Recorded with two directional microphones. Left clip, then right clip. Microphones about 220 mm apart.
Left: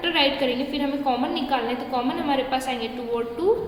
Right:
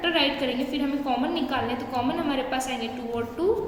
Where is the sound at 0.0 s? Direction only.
10° left (ahead or behind).